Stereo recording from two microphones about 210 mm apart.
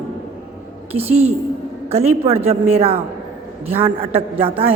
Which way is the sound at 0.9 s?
75° right (ahead or behind).